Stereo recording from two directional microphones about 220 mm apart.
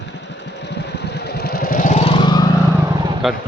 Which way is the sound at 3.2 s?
Centre (ahead or behind).